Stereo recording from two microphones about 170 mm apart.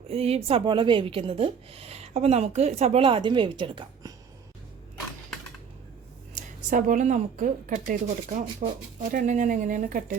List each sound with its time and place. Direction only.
0.1 s speech: 35° right (ahead or behind)
6.3 s a woman's voice: 50° right (ahead or behind)